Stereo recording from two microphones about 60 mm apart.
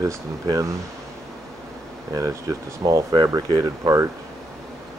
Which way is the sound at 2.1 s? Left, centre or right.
Right.